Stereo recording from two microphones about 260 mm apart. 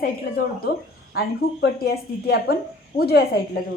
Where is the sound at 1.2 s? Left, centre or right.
Left.